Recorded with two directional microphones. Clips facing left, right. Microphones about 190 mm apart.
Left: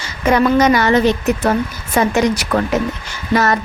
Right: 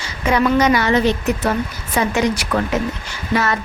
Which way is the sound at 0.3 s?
45° left (ahead or behind).